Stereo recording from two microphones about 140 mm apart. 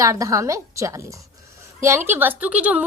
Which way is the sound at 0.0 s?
25° right (ahead or behind).